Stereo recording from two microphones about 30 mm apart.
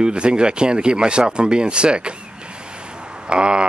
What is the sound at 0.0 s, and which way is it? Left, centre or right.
Speech, right.